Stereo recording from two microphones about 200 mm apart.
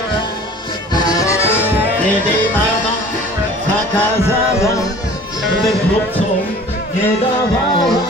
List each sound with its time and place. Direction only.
0.9 s music: 20° left (ahead or behind)